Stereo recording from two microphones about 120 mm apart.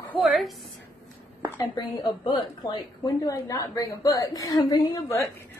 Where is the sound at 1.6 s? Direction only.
35° left (ahead or behind).